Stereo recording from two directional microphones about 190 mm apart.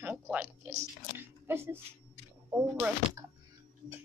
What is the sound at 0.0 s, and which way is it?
Speech, 10° right (ahead or behind).